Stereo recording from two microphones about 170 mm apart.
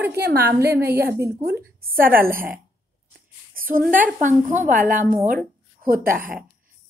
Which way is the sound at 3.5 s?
55° right (ahead or behind).